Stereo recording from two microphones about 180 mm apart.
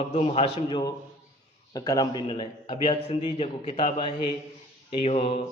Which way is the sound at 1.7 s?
20° left (ahead or behind).